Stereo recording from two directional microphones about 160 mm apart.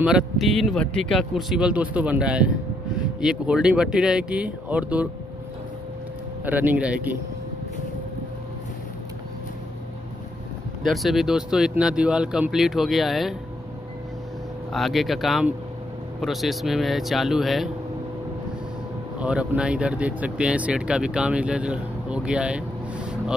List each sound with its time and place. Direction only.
0.0 s speech: centre (ahead or behind)
6.4 s speech: 10° right (ahead or behind)
10.9 s speech: centre (ahead or behind)
14.7 s speech: centre (ahead or behind)
19.1 s speech: 5° right (ahead or behind)